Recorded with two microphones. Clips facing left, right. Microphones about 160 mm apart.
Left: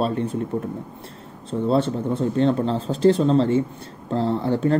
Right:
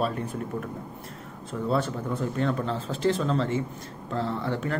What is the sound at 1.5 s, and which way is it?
Speech, 30° left (ahead or behind).